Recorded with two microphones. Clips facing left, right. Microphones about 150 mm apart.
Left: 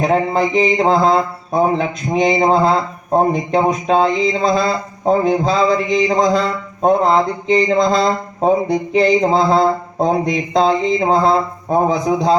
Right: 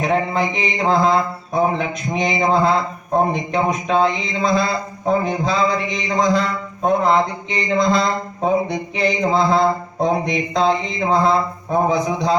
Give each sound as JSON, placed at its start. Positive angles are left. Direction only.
{"t": 0.0, "sound": "mantra", "side_deg": 35}